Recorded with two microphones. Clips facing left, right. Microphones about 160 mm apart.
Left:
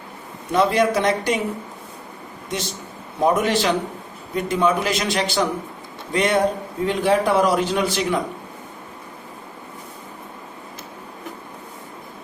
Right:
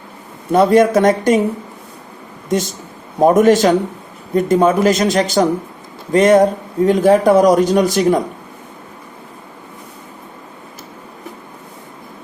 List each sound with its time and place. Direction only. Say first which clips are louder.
0.5 s speech: right 7 dB; 50° right (ahead or behind)
2.5 s speech: right 10 dB; 45° right (ahead or behind)